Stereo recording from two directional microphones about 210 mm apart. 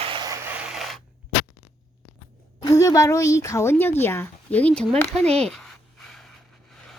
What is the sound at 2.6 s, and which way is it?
A woman's voice, 15° left (ahead or behind).